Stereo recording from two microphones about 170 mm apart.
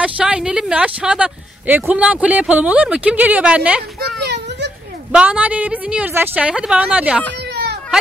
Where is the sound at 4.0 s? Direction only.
80° right.